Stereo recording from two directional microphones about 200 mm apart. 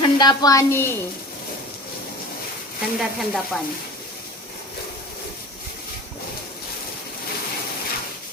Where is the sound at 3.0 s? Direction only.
Centre (ahead or behind).